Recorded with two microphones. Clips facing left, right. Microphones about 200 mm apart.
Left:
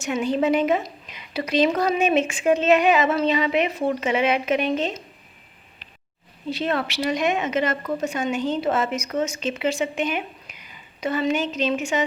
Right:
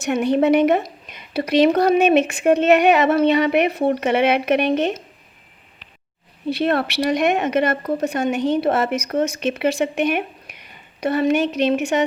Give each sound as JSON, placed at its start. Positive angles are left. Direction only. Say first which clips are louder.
{"t": 0.0, "sound": "speech", "louder": "right 5 dB", "side_deg": -65}
{"t": 6.5, "sound": "speech", "louder": "right 5 dB", "side_deg": -60}